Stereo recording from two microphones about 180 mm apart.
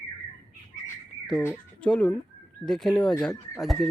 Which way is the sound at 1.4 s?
10° left (ahead or behind).